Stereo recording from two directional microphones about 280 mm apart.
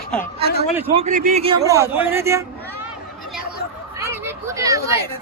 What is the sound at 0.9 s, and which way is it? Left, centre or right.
A man's voice, right.